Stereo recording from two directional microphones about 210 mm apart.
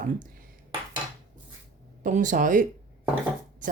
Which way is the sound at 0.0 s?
40° right (ahead or behind).